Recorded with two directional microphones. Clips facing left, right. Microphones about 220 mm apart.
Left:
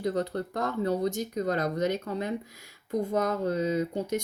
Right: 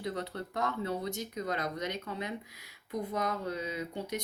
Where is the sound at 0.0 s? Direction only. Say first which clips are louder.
Left 8 dB; 45° left (ahead or behind).